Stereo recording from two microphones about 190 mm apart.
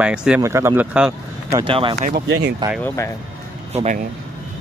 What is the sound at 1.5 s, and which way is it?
Speech, 25° right (ahead or behind).